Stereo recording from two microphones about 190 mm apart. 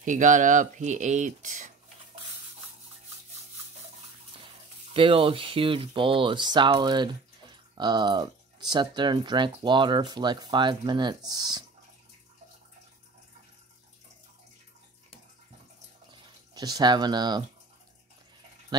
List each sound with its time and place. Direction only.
0.0 s speech: 40° right (ahead or behind)
4.9 s speech: 30° right (ahead or behind)
16.1 s a sound: 20° right (ahead or behind)
18.7 s speech: 20° right (ahead or behind)